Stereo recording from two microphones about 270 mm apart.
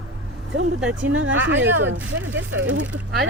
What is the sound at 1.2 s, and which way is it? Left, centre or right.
Speech, right.